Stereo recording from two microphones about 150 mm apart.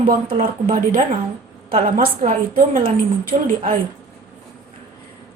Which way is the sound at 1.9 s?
60° right (ahead or behind).